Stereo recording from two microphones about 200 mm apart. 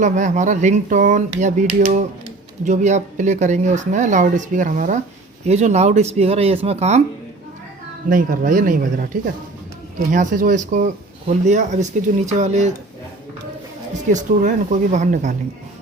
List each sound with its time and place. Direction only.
0.0 s speech: 35° right (ahead or behind)
8.1 s speech: 40° right (ahead or behind)
14.1 s speech: 40° right (ahead or behind)